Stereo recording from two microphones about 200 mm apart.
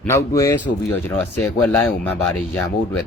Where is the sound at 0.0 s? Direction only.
15° left (ahead or behind).